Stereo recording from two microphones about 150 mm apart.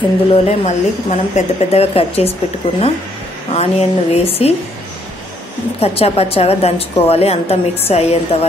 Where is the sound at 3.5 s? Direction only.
45° left (ahead or behind).